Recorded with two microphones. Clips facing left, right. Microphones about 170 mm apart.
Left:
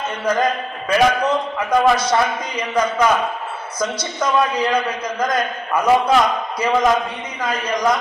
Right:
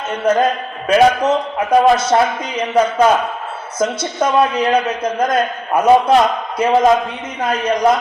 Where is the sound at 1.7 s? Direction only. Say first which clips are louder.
Right 4 dB; 25° right (ahead or behind).